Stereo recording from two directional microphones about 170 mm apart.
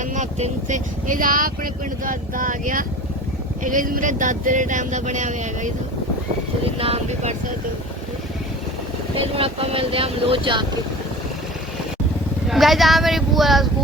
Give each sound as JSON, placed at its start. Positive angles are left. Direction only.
{"t": 0.0, "sound": "speech", "side_deg": -45}
{"t": 6.7, "sound": "speech", "side_deg": -35}
{"t": 9.1, "sound": "speech", "side_deg": -35}
{"t": 12.5, "sound": "speech", "side_deg": 0}